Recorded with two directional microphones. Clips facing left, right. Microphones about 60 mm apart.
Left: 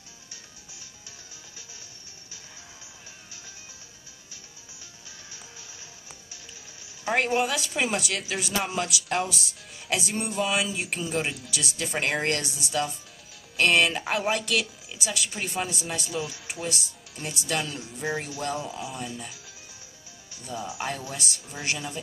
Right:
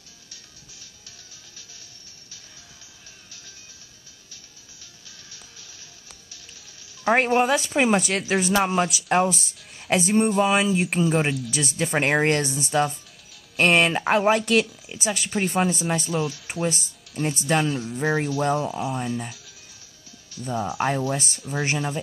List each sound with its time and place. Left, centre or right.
7.1 s speech: right
20.4 s speech: right